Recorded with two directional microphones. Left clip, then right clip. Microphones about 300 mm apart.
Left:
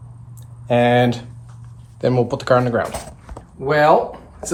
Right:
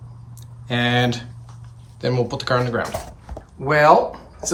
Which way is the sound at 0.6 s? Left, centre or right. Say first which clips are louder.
Left 5 dB; centre.